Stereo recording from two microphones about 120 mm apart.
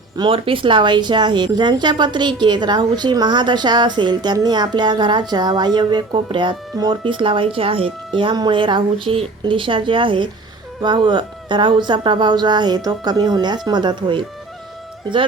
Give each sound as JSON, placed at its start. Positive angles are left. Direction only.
{"t": 0.2, "sound": "speech", "side_deg": -50}